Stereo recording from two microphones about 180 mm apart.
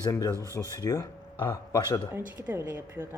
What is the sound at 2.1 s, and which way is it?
A woman's voice, 10° right (ahead or behind).